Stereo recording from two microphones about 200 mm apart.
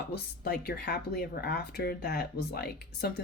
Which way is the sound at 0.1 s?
50° left (ahead or behind).